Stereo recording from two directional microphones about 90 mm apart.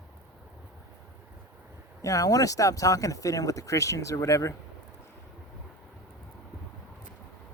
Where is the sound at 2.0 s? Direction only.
40° left (ahead or behind).